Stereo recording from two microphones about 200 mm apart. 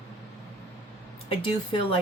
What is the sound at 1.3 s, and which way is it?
Speech, 25° left (ahead or behind).